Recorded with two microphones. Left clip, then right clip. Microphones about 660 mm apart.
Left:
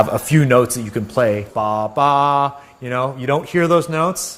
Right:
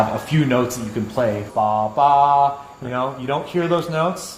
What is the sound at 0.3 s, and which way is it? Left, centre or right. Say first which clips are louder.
A man's voice: left 5 dB; left.